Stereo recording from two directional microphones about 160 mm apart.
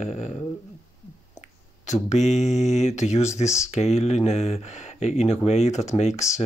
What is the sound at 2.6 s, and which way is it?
Speech, 45° left (ahead or behind).